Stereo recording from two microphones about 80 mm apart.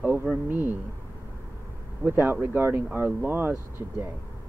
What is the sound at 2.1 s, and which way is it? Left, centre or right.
Speech, right.